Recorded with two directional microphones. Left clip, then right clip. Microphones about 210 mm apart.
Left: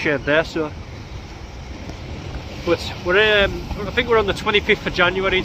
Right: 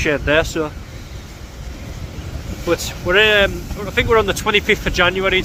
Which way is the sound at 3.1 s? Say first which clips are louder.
Right 2 dB; centre (ahead or behind).